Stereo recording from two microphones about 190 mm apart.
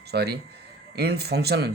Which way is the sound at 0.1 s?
60° right (ahead or behind).